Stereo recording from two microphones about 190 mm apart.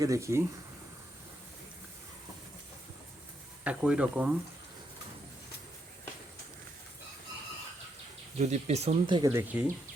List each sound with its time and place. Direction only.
0.0 s speech: 15° right (ahead or behind)
3.6 s speech: 5° right (ahead or behind)
8.4 s speech: 35° right (ahead or behind)
9.3 s speech: 10° right (ahead or behind)